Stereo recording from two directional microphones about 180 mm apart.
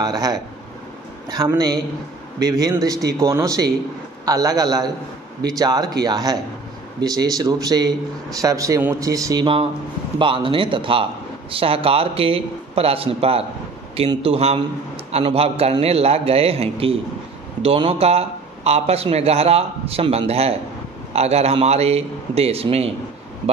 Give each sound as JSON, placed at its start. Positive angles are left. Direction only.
{"t": 0.0, "sound": "a man's voice", "side_deg": -20}